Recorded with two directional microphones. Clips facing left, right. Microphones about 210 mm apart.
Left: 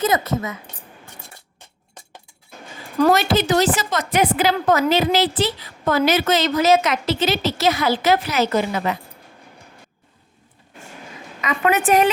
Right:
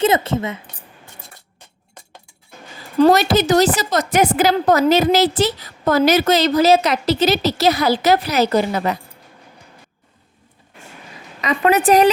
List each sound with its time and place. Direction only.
0.0 s speech: 30° right (ahead or behind)
3.0 s a woman's voice: 40° right (ahead or behind)
11.3 s a woman's voice: 35° right (ahead or behind)